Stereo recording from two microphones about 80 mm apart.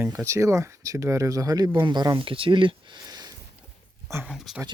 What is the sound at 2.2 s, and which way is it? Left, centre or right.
Speech, right.